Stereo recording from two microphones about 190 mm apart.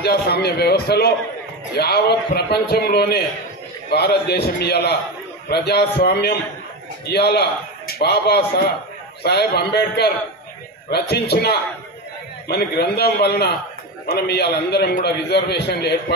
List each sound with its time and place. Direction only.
0.0 s a man's voice: 55° left (ahead or behind)